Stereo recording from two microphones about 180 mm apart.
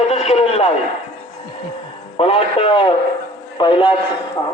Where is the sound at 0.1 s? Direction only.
35° left (ahead or behind).